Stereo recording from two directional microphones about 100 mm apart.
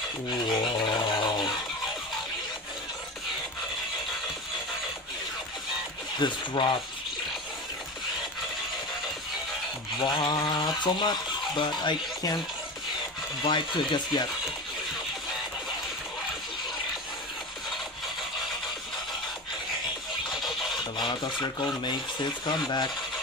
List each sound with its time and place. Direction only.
0.5 s a sound: 45° left (ahead or behind)
6.1 s speech: 55° left (ahead or behind)
9.9 s speech: 50° left (ahead or behind)
13.4 s speech: 50° left (ahead or behind)
21.0 s speech: 50° left (ahead or behind)